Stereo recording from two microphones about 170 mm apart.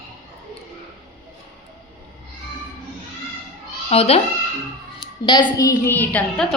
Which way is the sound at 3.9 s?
35° left (ahead or behind).